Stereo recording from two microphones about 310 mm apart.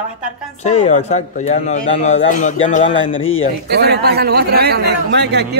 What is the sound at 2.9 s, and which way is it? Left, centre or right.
Speech, left.